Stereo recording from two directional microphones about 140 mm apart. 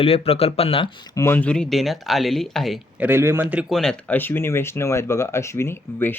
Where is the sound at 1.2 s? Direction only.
15° left (ahead or behind).